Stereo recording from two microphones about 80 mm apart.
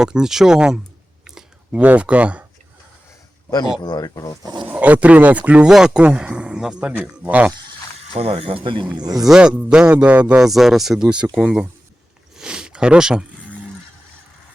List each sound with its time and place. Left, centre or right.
0.0 s speech: centre
1.2 s clicking: centre
3.8 s speech: left
4.7 s speech: centre
8.6 s speech: right
9.2 s speech: centre
10.5 s speech: centre
12.4 s a sound: centre